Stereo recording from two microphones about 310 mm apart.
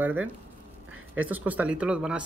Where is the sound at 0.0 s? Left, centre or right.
Centre.